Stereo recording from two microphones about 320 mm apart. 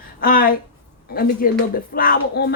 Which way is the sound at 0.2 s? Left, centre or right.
Left.